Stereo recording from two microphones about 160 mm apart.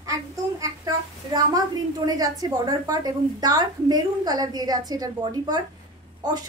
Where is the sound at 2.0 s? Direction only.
25° right (ahead or behind).